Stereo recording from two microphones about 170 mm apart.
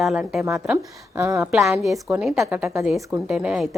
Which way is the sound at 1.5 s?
Centre (ahead or behind).